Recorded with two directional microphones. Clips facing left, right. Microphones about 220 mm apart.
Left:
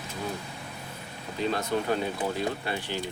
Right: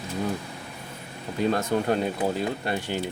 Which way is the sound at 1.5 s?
45° right (ahead or behind).